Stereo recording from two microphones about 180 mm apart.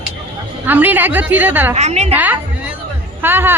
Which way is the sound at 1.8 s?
40° right (ahead or behind).